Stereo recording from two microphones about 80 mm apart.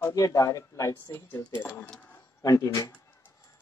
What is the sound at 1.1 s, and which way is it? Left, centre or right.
Speech, left.